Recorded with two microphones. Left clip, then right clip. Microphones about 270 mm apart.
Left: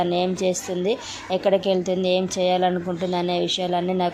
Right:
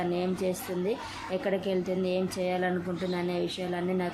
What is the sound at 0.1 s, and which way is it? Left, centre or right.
A woman's voice, centre.